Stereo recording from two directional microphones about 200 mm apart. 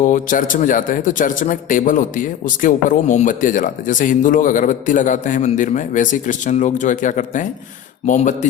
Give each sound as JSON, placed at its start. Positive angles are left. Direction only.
{"t": 0.0, "sound": "a man's voice", "side_deg": 40}